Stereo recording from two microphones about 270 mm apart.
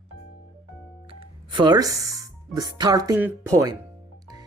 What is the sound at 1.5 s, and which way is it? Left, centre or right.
Speech, centre.